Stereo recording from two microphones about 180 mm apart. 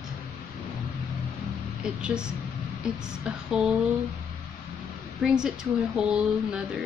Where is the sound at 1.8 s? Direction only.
5° right (ahead or behind).